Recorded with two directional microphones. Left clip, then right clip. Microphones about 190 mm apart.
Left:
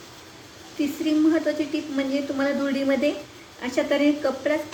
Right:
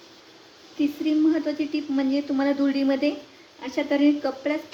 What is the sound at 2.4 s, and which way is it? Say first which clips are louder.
Speech: right 1 dB; 30° right (ahead or behind).